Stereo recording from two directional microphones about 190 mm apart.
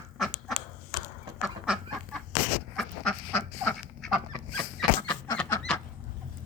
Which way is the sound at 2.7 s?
5° left (ahead or behind).